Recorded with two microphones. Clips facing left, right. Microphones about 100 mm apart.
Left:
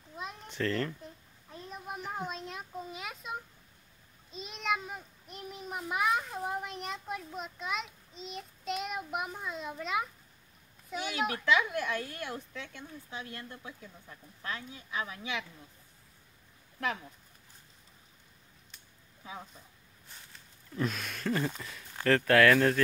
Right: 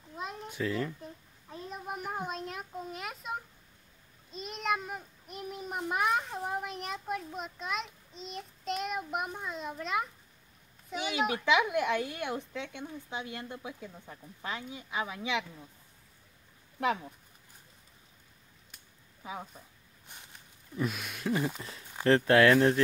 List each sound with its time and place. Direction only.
0.1 s speech: 5° right (ahead or behind)
1.5 s a sound: 5° right (ahead or behind)
2.0 s a child's voice: 10° right (ahead or behind)
11.0 s speech: 15° right (ahead or behind)
13.8 s speech: 30° right (ahead or behind)
14.4 s speech: 15° right (ahead or behind)
16.8 s speech: 15° right (ahead or behind)
19.2 s speech: 20° right (ahead or behind)
22.0 s speech: 25° right (ahead or behind)